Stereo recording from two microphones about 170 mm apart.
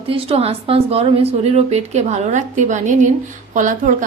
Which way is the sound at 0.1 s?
35° right (ahead or behind).